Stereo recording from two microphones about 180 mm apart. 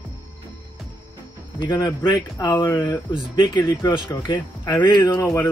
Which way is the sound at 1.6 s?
25° left (ahead or behind).